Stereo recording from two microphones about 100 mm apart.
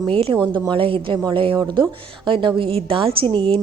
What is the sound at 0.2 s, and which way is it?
A woman's voice, 60° right (ahead or behind).